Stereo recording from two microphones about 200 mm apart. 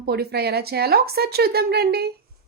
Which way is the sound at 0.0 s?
55° right (ahead or behind).